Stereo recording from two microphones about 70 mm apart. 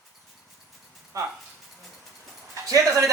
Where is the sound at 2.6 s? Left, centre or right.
Right.